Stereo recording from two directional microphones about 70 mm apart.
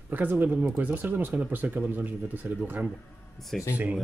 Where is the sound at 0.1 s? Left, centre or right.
Right.